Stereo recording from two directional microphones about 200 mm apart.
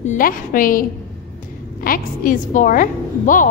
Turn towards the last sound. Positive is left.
turn(degrees=40)  # may be behind; listen again after turning